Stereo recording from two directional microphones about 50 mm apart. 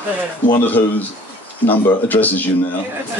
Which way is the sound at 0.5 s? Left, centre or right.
Left.